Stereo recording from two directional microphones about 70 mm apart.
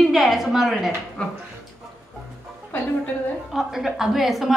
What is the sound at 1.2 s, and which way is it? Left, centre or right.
Speech, centre.